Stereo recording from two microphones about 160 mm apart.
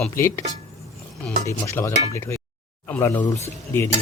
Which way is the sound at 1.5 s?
15° left (ahead or behind).